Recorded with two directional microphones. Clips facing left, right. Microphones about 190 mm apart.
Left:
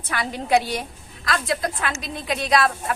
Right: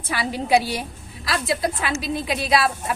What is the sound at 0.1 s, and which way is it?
A woman's voice, 10° right (ahead or behind).